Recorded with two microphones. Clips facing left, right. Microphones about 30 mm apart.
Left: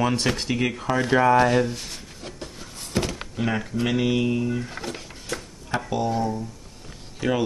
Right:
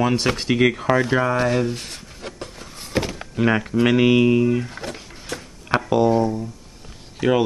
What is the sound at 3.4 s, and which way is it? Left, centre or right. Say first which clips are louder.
Speech: right 7 dB; right.